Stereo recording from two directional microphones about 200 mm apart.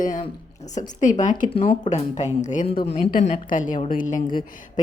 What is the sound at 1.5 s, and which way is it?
A woman's voice, 25° left (ahead or behind).